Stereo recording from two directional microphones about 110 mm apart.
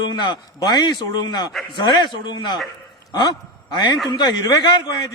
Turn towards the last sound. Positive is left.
turn(degrees=40)  # may be behind; listen again after turning